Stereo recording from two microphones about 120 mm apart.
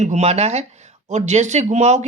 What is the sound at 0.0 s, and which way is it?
Speech, 65° right (ahead or behind).